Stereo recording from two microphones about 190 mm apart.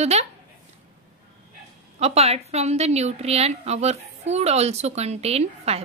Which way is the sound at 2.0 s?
35° right (ahead or behind).